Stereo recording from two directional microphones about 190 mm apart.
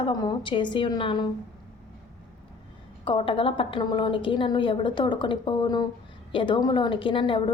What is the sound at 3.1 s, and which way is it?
A woman's voice, 25° left (ahead or behind).